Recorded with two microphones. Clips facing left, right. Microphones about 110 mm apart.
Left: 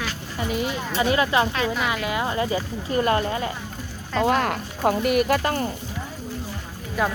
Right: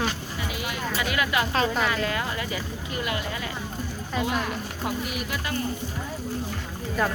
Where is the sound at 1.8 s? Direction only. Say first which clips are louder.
Left 1 dB; 15° left (ahead or behind).